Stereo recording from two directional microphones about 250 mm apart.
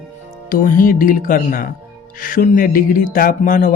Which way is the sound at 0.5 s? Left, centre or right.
Left.